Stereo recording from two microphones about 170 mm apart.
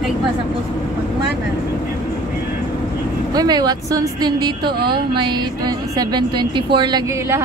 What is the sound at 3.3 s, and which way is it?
A woman's voice, 25° right (ahead or behind).